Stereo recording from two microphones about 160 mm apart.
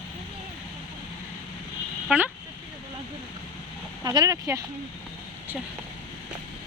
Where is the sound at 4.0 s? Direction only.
25° right (ahead or behind).